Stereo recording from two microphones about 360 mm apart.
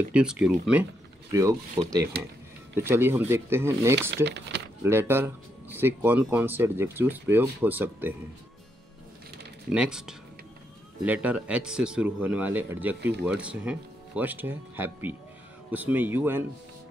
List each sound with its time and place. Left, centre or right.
0.1 s speech: centre
4.1 s speech: right
4.8 s speech: centre
9.7 s speech: centre